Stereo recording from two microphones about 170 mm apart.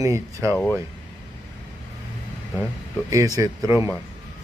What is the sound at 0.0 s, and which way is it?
Speech, 20° right (ahead or behind).